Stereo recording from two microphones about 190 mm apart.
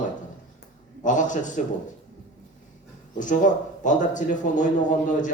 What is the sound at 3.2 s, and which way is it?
A man's voice, 40° left (ahead or behind).